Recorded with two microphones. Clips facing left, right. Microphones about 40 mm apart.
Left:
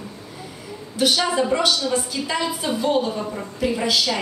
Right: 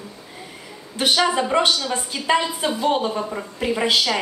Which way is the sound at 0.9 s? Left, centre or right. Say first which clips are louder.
Right 1 dB; right.